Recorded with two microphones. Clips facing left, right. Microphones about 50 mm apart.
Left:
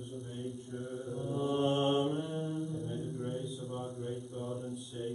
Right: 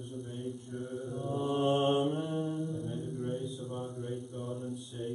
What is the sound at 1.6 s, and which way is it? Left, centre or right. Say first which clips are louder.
Mantra: right 3 dB; centre.